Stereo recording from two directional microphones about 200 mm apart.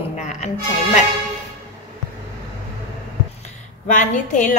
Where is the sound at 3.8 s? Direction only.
40° left (ahead or behind).